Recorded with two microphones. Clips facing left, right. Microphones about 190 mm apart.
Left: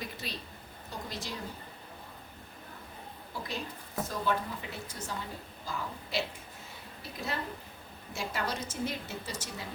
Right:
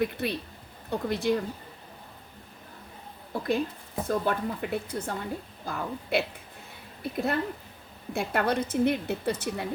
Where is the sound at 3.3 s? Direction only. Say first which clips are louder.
Right 11 dB; 55° right (ahead or behind).